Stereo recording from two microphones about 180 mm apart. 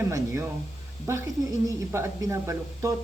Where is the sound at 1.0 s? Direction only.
15° right (ahead or behind).